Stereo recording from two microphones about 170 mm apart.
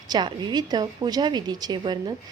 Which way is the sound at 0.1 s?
25° right (ahead or behind).